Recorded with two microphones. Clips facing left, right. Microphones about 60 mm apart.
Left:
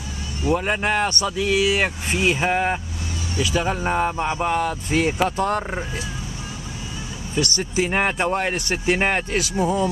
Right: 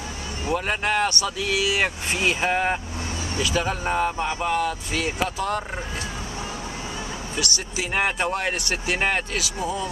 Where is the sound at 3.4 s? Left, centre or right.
Centre; by 5.6 s left.